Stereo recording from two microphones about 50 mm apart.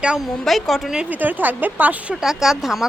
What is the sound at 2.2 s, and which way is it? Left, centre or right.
Speech, centre.